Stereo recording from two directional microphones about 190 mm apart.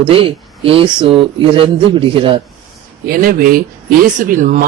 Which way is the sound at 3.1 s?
50° right (ahead or behind).